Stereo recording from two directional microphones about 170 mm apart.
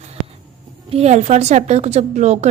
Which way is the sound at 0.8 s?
40° right (ahead or behind).